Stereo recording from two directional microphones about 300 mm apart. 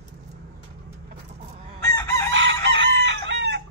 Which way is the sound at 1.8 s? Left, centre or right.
Centre.